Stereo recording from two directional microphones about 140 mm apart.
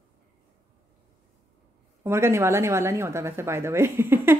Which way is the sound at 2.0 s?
20° right (ahead or behind).